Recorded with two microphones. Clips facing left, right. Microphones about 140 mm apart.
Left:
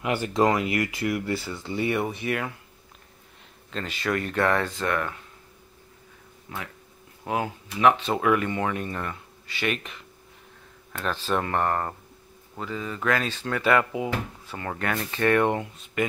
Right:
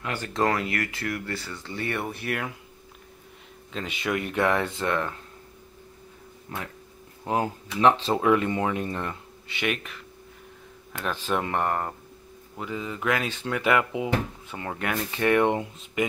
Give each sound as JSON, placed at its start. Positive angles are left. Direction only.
{"t": 0.0, "sound": "speech", "side_deg": 15}
{"t": 2.1, "sound": "speech", "side_deg": 0}
{"t": 3.7, "sound": "speech", "side_deg": -10}
{"t": 7.2, "sound": "speech", "side_deg": -30}
{"t": 11.1, "sound": "speech", "side_deg": -15}